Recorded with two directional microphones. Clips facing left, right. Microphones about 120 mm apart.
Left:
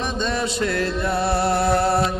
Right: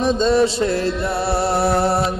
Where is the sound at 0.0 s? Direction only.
30° right (ahead or behind).